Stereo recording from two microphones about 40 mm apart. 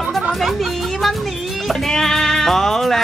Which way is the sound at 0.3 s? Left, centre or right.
Centre.